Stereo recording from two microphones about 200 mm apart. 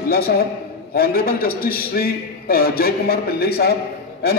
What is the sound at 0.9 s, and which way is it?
A man's voice, 50° left (ahead or behind).